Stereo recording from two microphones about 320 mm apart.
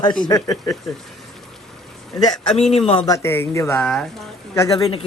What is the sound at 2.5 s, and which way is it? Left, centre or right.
Speech, centre.